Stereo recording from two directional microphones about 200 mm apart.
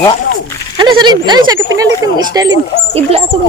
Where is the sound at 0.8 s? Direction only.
20° right (ahead or behind).